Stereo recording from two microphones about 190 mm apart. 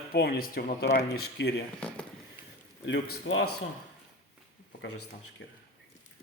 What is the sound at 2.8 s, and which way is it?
Speech, 75° left (ahead or behind).